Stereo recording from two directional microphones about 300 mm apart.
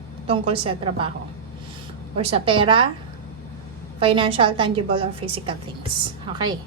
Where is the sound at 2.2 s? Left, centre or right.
Centre.